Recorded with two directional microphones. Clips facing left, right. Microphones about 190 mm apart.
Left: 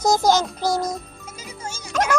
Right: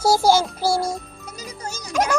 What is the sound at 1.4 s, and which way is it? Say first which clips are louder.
Music: right 2 dB; 35° right (ahead or behind).